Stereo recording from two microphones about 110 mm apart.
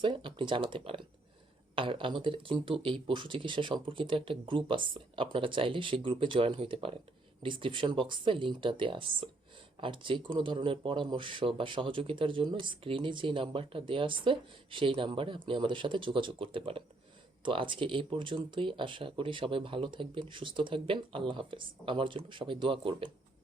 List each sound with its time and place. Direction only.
0.0 s speech: 50° right (ahead or behind)